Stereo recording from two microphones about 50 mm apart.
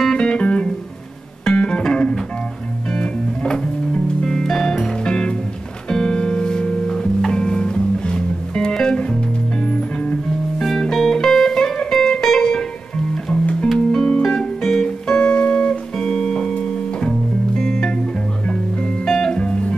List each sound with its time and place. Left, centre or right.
0.0 s music: centre
10.6 s music: centre